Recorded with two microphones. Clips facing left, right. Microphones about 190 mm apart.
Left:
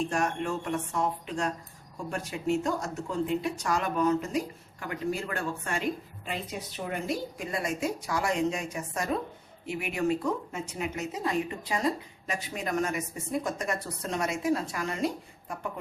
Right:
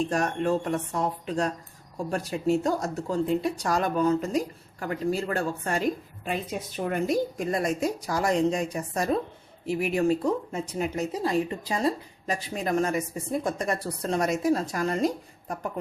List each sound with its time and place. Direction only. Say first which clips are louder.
0.1 s speech: right 4 dB; 35° right (ahead or behind)